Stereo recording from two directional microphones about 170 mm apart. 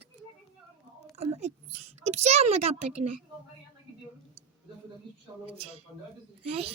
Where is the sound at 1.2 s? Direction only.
40° right (ahead or behind).